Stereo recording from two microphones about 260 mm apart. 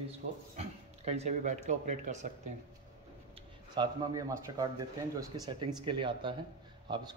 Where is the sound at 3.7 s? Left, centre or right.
Centre.